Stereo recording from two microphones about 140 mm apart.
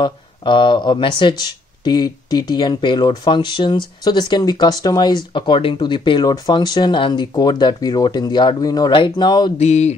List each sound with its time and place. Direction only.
0.0 s speech: 35° left (ahead or behind)
9.6 s mantra: 55° left (ahead or behind)